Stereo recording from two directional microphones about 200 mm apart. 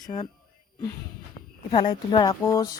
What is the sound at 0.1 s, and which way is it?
Speech, 30° left (ahead or behind).